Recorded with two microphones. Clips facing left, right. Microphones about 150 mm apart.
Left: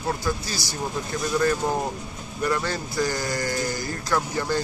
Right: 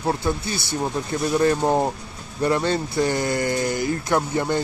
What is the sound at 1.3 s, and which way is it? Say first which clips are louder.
Speech: right 4 dB; 30° right (ahead or behind).